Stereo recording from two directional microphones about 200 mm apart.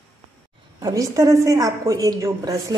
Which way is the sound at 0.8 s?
15° right (ahead or behind).